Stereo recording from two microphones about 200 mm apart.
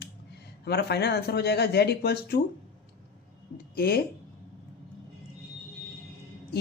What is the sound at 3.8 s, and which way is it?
Speech, 50° left (ahead or behind).